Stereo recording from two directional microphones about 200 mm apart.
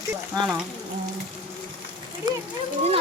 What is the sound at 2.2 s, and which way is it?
Speech, 20° right (ahead or behind).